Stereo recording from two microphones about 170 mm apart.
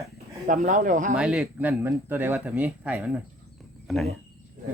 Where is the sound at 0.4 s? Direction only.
50° right (ahead or behind).